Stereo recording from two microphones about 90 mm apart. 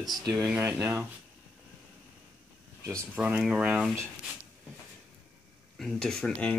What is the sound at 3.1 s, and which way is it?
Speech, 15° right (ahead or behind).